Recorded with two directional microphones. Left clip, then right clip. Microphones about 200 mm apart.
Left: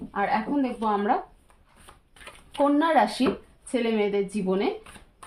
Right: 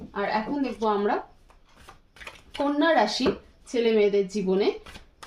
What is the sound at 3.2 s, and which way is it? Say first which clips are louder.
Speech: even; 25° left (ahead or behind).